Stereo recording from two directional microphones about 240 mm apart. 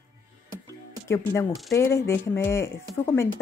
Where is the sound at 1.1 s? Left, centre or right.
Centre.